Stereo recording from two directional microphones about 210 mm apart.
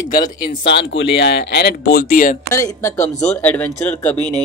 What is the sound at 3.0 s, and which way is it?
Speech, 35° left (ahead or behind).